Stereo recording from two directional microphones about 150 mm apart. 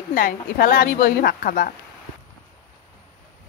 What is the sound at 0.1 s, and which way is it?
A woman's voice, 70° left (ahead or behind).